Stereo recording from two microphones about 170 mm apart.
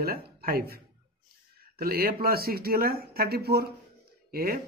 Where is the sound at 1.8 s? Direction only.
65° right (ahead or behind).